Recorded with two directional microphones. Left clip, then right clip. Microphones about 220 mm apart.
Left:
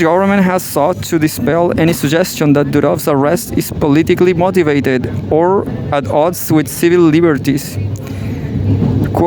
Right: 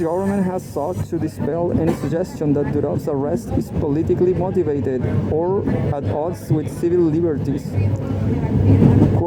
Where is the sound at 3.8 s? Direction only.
30° left (ahead or behind).